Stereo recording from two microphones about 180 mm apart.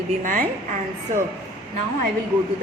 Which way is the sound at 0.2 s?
50° right (ahead or behind).